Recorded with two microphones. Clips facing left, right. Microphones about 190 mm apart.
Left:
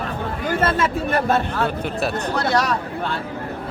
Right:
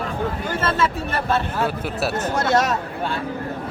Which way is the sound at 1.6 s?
5° right (ahead or behind).